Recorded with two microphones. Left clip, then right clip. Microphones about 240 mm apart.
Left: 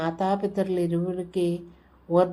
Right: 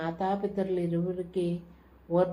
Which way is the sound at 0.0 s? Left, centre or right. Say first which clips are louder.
Left 5 dB; left.